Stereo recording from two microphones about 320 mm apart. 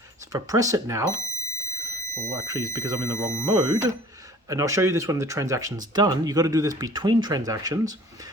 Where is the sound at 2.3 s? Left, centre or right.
Centre.